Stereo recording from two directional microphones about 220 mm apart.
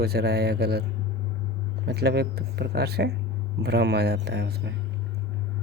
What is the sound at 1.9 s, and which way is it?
Speech, 45° right (ahead or behind).